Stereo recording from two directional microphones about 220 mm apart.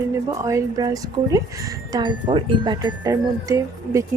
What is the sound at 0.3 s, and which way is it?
Speech, 15° right (ahead or behind).